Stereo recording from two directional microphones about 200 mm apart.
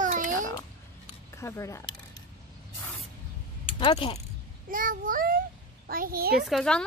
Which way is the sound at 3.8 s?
25° left (ahead or behind).